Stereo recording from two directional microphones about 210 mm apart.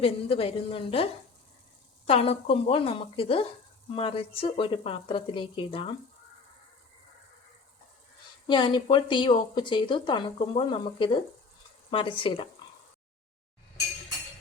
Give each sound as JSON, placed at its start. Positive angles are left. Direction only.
{"t": 0.0, "sound": "speech", "side_deg": 25}
{"t": 2.0, "sound": "speech", "side_deg": 30}
{"t": 8.4, "sound": "speech", "side_deg": 20}